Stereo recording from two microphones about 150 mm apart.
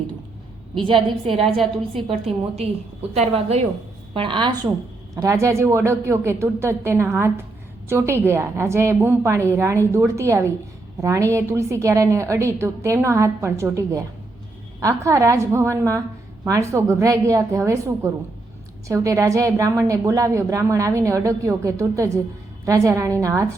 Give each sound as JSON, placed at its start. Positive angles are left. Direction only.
{"t": 2.0, "sound": "a woman's voice", "side_deg": -40}
{"t": 5.1, "sound": "a woman's voice", "side_deg": -20}